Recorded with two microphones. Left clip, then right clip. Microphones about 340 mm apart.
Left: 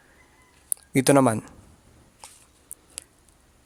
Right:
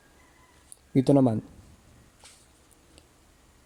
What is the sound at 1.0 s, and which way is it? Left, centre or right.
Speech, left.